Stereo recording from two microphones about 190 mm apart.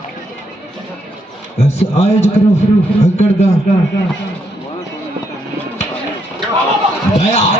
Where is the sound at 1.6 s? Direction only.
35° left (ahead or behind).